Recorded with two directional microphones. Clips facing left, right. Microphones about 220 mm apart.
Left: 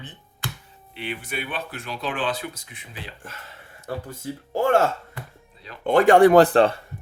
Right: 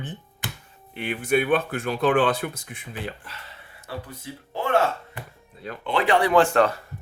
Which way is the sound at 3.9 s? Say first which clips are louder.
Left 4 dB; 45° left (ahead or behind).